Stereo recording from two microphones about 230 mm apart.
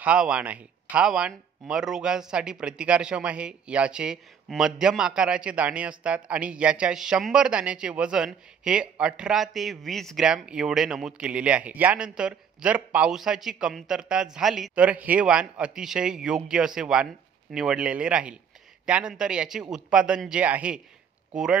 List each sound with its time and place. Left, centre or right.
0.0 s speech: centre